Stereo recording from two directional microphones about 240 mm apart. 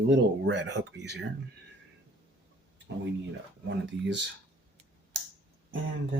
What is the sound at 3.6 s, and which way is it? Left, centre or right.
Speech, right.